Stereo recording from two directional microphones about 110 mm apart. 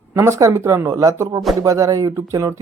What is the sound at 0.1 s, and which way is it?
Speech, 25° right (ahead or behind).